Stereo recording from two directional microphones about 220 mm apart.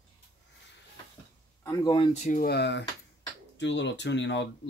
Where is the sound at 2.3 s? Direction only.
40° left (ahead or behind).